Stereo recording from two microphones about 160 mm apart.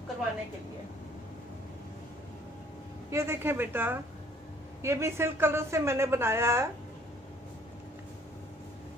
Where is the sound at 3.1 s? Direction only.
15° right (ahead or behind).